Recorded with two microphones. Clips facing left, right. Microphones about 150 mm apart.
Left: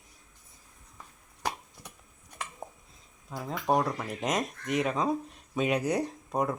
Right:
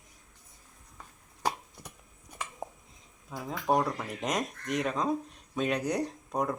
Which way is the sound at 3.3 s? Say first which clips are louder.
Left 1 dB; centre (ahead or behind).